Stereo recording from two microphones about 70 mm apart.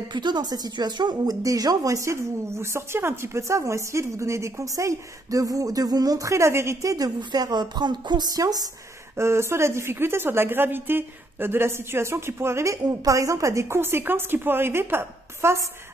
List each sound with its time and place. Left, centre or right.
0.1 s speech: right
7.2 s speech: right
9.1 s speech: right
12.8 s speech: right
13.7 s speech: right